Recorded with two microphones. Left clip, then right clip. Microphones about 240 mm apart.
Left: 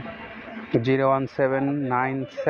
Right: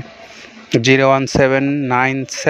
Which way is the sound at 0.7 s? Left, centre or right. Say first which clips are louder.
Right 9 dB; right.